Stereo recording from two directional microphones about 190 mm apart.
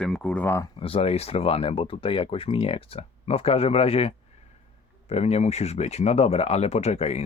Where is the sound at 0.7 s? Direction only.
30° left (ahead or behind).